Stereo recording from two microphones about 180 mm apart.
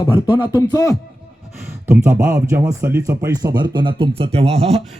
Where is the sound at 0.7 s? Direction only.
20° left (ahead or behind).